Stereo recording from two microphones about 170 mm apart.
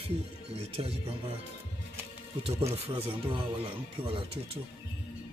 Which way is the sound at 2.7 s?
30° right (ahead or behind).